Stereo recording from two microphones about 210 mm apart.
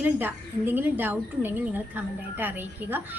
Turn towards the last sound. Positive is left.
turn(degrees=-10)  # may be behind; listen again after turning